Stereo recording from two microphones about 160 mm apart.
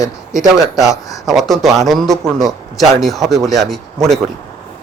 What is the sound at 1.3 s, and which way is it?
Speech, centre (ahead or behind).